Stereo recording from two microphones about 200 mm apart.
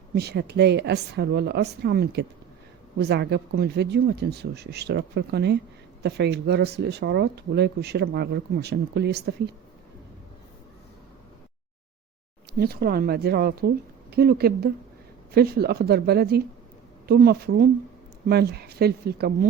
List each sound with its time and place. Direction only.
0.1 s speech: 55° right (ahead or behind)
12.5 s a woman's voice: 50° right (ahead or behind)